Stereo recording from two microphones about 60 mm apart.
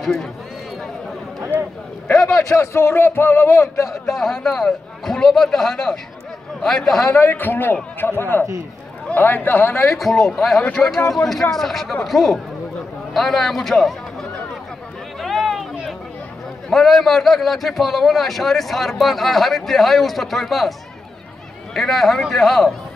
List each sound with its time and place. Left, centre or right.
0.0 s speech: centre
2.3 s a man's voice: left
3.8 s a man's voice: centre
7.2 s a man's voice: left
9.9 s a man's voice: centre
15.1 s run: centre
16.7 s a man's voice: centre
21.7 s a man's voice: centre